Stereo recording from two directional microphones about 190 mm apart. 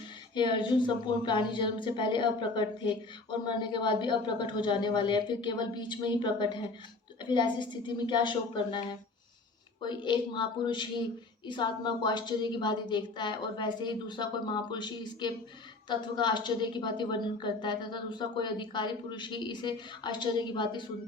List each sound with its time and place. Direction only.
0.3 s a woman's voice: 25° left (ahead or behind)